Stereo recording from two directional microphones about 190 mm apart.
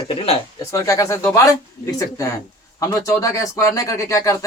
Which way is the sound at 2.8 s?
15° left (ahead or behind).